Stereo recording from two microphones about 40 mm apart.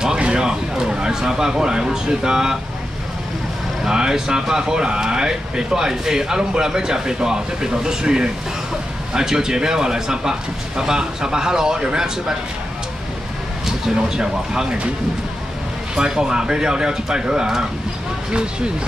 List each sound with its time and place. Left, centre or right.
0.2 s speech: right
3.8 s speech: centre
13.7 s speech: centre
16.0 s speech: centre